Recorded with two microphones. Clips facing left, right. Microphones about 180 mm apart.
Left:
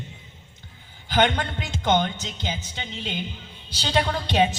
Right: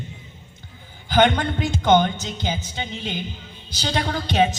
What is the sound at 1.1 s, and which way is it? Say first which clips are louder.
A man's voice: right 4 dB; 45° right (ahead or behind).